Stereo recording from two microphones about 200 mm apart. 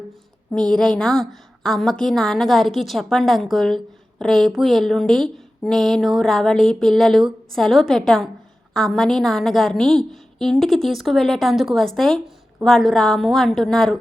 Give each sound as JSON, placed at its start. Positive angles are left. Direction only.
{"t": 0.5, "sound": "speech", "side_deg": 5}